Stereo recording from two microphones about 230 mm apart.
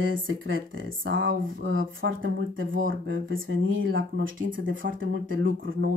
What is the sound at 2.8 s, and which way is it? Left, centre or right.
Speech, right.